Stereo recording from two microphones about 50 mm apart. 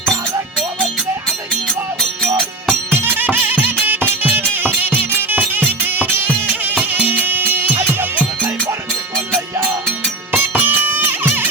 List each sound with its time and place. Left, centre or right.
2.0 s music: centre
2.9 s music: right
10.3 s music: right